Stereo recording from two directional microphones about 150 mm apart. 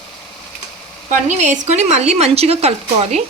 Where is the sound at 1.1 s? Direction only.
50° right (ahead or behind).